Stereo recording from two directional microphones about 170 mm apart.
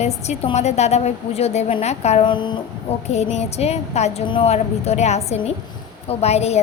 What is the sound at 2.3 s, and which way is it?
Speech, 30° left (ahead or behind).